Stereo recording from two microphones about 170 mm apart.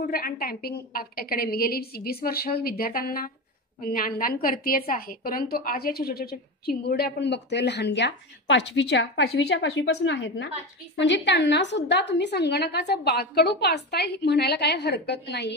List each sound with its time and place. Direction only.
0.1 s a woman's voice: 60° left (ahead or behind); by 15.5 s 80° left